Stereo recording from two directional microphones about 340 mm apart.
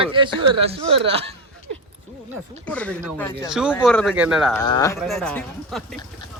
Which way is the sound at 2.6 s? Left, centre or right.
Centre.